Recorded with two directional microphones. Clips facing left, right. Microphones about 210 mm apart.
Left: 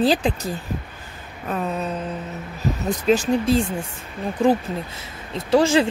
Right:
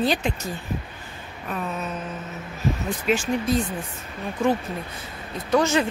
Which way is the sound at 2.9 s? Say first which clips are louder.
Left 7 dB; 40° left (ahead or behind).